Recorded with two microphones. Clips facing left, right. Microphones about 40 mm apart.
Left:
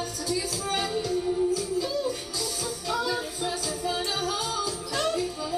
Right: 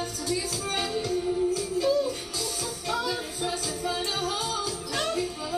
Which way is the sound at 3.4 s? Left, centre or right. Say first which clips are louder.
Even; right.